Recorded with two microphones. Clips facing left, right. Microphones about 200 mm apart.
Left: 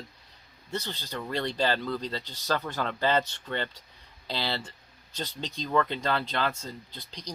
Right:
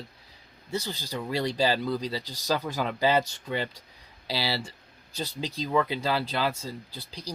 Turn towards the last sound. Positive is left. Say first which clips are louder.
# right 2 dB
turn(degrees=-5)  # may be behind; listen again after turning